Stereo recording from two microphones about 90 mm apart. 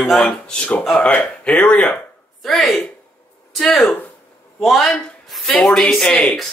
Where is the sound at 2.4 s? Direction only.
Centre (ahead or behind).